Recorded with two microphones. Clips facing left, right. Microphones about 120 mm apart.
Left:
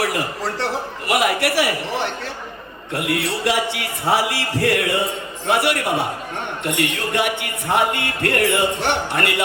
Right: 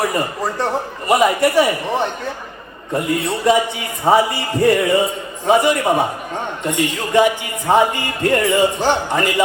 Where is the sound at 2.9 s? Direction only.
80° left.